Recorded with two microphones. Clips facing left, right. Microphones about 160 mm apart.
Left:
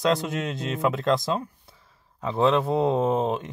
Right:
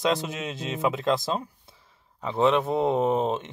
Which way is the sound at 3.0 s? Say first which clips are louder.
Even; 20° right (ahead or behind).